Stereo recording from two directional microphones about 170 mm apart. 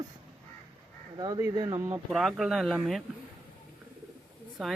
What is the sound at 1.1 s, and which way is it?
Speech, 20° right (ahead or behind).